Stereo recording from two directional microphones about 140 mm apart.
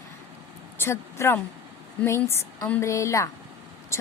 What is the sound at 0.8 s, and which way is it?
A woman's voice, 20° left (ahead or behind).